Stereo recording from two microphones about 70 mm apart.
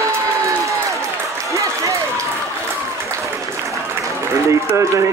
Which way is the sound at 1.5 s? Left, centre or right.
Right.